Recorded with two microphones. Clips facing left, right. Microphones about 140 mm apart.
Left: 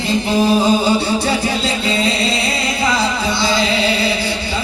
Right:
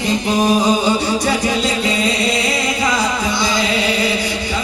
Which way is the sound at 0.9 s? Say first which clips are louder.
Even; 30° left (ahead or behind).